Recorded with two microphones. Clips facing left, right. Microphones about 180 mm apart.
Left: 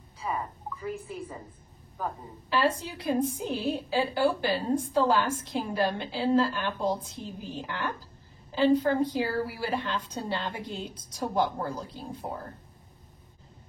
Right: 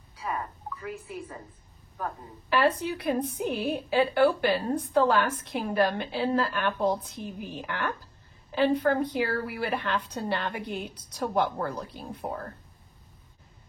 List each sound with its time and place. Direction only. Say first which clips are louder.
0.2 s a sound: even; 5° left (ahead or behind)
0.8 s a woman's voice: left 2 dB; 5° right (ahead or behind)
2.8 s a woman's voice: even; 60° right (ahead or behind)